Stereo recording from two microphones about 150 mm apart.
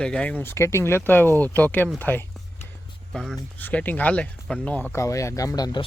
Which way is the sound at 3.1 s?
Centre (ahead or behind).